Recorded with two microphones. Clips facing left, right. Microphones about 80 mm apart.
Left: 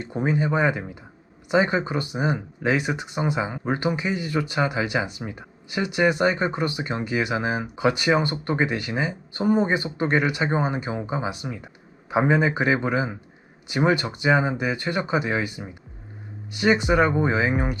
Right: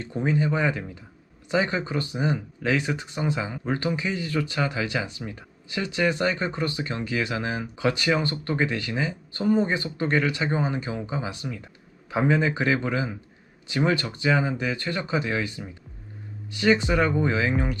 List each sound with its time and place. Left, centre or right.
0.0 s speech: centre